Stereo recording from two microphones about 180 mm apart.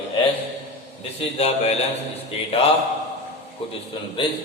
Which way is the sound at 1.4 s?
35° left (ahead or behind).